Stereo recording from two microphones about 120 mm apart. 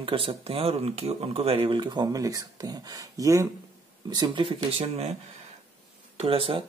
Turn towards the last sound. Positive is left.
turn(degrees=-50)  # may be behind; listen again after turning